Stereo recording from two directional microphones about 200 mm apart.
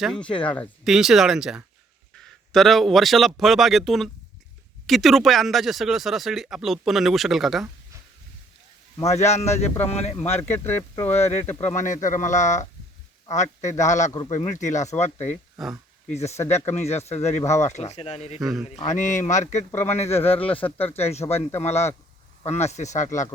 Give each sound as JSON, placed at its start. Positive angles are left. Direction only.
{"t": 0.0, "sound": "speech", "side_deg": 0}
{"t": 9.1, "sound": "speech", "side_deg": 35}
{"t": 10.4, "sound": "speech", "side_deg": 10}
{"t": 11.1, "sound": "speech", "side_deg": 35}
{"t": 15.6, "sound": "speech", "side_deg": 0}
{"t": 16.0, "sound": "speech", "side_deg": 35}
{"t": 18.3, "sound": "speech", "side_deg": 0}
{"t": 18.8, "sound": "speech", "side_deg": 40}
{"t": 20.7, "sound": "speech", "side_deg": 10}
{"t": 20.9, "sound": "speech", "side_deg": 30}